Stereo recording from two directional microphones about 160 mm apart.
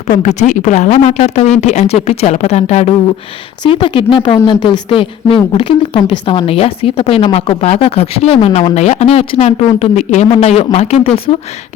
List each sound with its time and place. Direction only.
0.2 s speech: 45° left (ahead or behind)
3.6 s a woman's voice: 30° left (ahead or behind)